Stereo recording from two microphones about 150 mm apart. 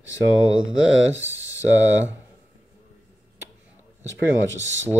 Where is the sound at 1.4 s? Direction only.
20° left (ahead or behind).